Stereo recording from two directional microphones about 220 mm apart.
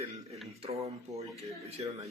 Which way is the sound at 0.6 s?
25° right (ahead or behind).